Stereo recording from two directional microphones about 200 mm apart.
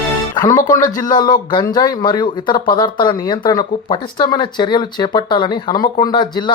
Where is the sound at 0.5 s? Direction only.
40° left (ahead or behind).